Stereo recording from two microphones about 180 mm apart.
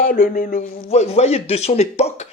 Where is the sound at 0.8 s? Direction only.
35° left (ahead or behind).